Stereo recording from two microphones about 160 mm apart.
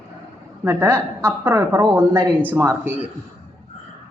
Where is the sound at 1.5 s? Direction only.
25° right (ahead or behind).